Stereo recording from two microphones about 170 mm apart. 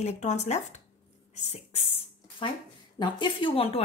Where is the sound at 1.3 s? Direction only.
40° left (ahead or behind).